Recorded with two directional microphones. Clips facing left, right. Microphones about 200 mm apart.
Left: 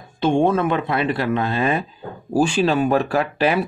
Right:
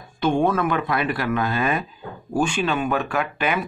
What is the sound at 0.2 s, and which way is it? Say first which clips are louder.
Speech: left 3 dB; 25° left (ahead or behind).